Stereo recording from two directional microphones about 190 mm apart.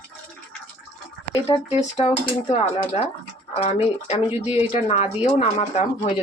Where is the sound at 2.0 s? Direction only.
35° left (ahead or behind).